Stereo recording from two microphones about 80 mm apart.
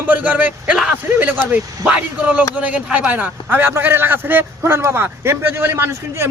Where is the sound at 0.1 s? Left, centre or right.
Right.